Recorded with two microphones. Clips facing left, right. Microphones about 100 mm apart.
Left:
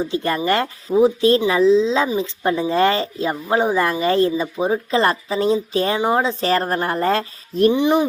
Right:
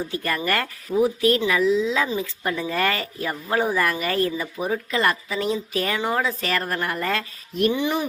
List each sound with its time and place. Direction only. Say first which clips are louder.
0.0 s a woman's voice: left 5 dB; 25° left (ahead or behind)
7.7 s speech: left 9 dB; 20° left (ahead or behind)